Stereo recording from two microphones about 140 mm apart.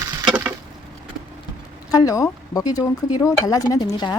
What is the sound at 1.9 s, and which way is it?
Speech, 25° left (ahead or behind).